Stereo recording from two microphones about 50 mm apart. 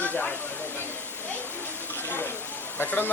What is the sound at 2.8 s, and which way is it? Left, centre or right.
Speech, left.